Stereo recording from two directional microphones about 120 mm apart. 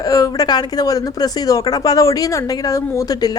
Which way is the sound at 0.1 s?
30° left (ahead or behind).